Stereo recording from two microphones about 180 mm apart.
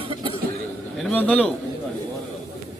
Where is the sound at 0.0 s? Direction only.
30° right (ahead or behind).